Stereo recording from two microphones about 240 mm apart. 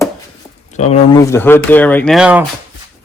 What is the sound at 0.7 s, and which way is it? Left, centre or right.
Speech, left.